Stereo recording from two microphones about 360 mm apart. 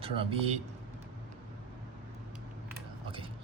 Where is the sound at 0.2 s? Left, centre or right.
Centre.